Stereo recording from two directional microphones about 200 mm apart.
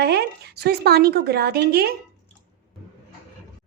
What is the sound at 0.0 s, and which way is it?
Speech, 55° right (ahead or behind).